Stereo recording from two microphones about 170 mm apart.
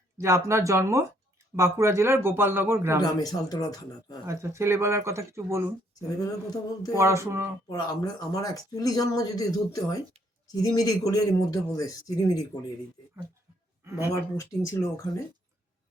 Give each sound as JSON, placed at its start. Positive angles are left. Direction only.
{"t": 0.2, "sound": "speech", "side_deg": -15}
{"t": 3.0, "sound": "speech", "side_deg": 20}
{"t": 4.3, "sound": "speech", "side_deg": -15}
{"t": 5.9, "sound": "speech", "side_deg": 20}
{"t": 6.9, "sound": "speech", "side_deg": -15}
{"t": 7.7, "sound": "speech", "side_deg": 20}
{"t": 14.2, "sound": "speech", "side_deg": 20}